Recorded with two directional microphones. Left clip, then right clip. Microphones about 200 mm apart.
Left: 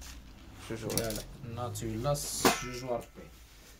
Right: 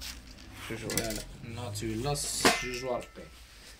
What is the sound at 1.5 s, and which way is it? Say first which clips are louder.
Speech: right 1 dB; 60° left (ahead or behind).